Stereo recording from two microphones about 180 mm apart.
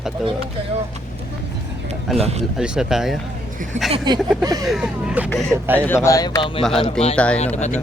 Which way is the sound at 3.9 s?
25° right (ahead or behind).